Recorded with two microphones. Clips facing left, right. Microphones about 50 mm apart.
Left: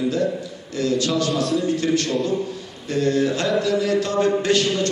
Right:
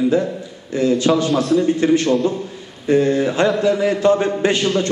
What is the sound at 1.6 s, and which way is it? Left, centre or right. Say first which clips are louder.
A man's voice: right 5 dB; right.